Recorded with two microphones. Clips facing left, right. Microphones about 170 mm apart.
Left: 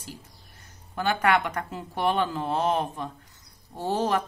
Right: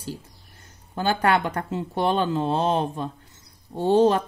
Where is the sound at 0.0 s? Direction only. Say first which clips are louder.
Right 8 dB; 30° right (ahead or behind).